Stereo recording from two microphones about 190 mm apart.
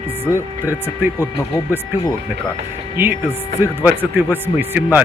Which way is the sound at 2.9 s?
10° right (ahead or behind).